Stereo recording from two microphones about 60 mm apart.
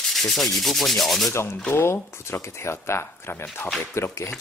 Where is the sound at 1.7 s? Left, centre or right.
Left.